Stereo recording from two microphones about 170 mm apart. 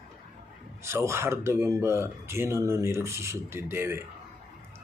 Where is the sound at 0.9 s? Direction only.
15° right (ahead or behind).